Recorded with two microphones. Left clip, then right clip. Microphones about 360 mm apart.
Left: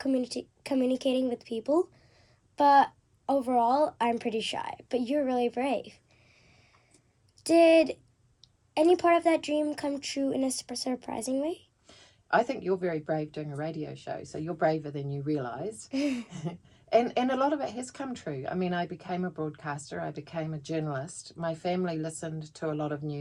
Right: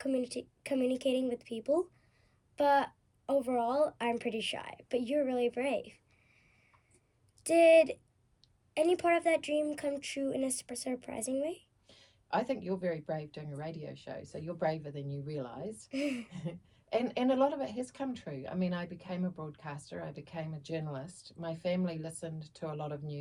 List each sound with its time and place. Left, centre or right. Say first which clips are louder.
0.0 s a woman's voice: left 4 dB; centre
7.4 s a woman's voice: left 2 dB; centre
11.9 s speech: left 8 dB; left
15.9 s a woman's voice: left 4 dB; centre
16.9 s speech: left 6 dB; left